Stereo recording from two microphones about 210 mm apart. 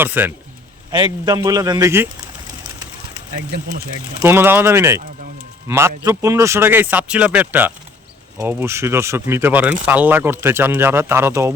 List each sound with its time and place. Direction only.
0.0 s speech: 10° right (ahead or behind)
4.2 s speech: 10° right (ahead or behind)